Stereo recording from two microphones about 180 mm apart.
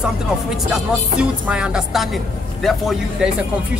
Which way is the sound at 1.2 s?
5° right (ahead or behind).